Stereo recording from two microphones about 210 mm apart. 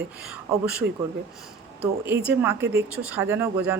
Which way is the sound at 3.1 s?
10° right (ahead or behind).